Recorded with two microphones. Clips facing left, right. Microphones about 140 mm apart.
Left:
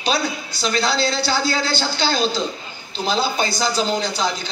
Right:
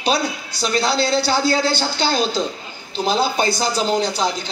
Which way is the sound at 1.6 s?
55° right (ahead or behind).